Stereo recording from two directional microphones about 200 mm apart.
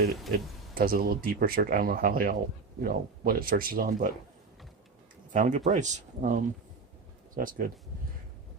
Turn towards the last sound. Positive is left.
turn(degrees=-45)  # may be behind; listen again after turning